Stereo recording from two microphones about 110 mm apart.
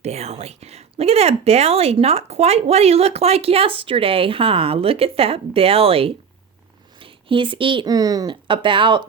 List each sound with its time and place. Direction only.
0.0 s speech: 75° right (ahead or behind); by 7.9 s 50° right (ahead or behind)
7.9 s speech: 35° right (ahead or behind)
8.4 s speech: 50° right (ahead or behind)